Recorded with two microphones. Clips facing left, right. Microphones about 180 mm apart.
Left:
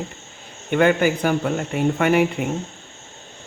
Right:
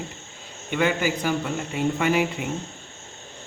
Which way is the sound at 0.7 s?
55° left (ahead or behind).